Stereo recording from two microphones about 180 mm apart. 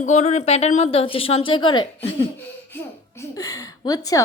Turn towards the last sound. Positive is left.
turn(degrees=20)  # may be behind; listen again after turning